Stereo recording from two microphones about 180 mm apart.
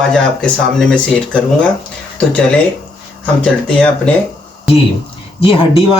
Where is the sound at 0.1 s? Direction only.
5° left (ahead or behind).